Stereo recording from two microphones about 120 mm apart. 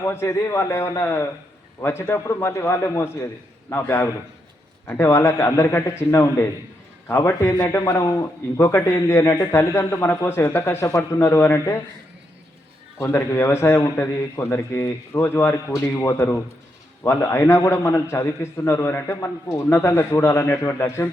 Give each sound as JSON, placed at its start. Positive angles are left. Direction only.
{"t": 0.0, "sound": "a man's voice", "side_deg": 20}
{"t": 13.0, "sound": "a man's voice", "side_deg": 20}